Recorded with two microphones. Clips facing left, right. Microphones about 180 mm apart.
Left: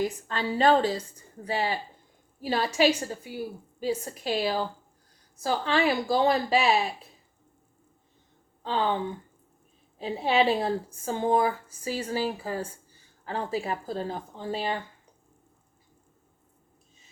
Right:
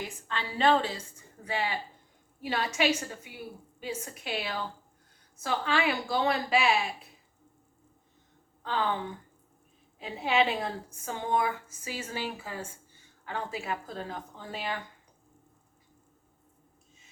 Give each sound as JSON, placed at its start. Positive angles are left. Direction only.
{"t": 0.3, "sound": "a woman's voice", "side_deg": 40}
{"t": 8.6, "sound": "speech", "side_deg": 30}
{"t": 10.0, "sound": "a woman's voice", "side_deg": 35}